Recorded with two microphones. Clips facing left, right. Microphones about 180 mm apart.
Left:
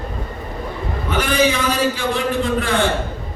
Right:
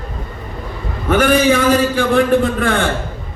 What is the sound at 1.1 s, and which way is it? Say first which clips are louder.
A man's voice: right 6 dB; 55° right (ahead or behind).